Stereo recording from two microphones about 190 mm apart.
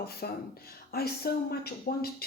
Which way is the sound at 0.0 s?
55° left (ahead or behind).